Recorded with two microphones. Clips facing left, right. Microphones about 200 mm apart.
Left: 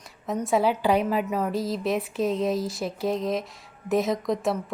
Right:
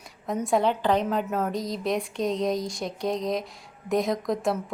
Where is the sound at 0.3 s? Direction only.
Centre (ahead or behind).